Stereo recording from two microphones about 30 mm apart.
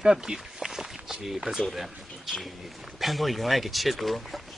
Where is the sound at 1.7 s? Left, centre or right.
Centre.